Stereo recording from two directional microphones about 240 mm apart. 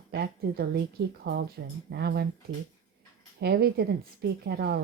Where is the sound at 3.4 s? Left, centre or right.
Right.